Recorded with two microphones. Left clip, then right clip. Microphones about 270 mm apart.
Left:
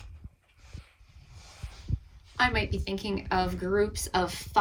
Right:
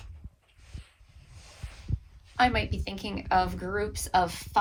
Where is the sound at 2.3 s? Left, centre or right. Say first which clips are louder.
Right 2 dB; right.